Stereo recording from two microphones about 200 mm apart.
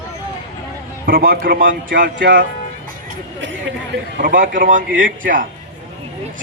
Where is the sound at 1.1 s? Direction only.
50° right (ahead or behind).